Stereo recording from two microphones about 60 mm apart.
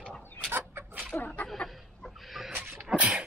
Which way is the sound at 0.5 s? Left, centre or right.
Right.